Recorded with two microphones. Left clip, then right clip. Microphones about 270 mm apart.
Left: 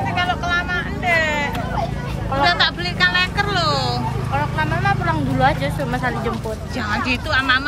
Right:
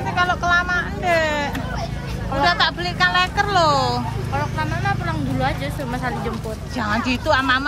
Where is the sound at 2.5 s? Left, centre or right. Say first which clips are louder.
Even; centre.